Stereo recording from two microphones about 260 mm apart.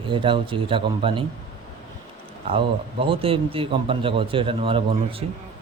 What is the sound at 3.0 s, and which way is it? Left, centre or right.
A man's voice, right.